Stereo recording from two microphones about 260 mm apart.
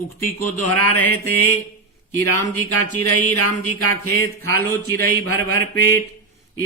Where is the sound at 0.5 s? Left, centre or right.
Left.